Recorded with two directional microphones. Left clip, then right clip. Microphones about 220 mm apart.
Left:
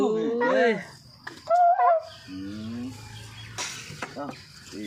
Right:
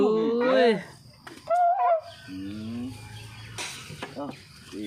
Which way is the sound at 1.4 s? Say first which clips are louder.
Left 3 dB; 5° left (ahead or behind).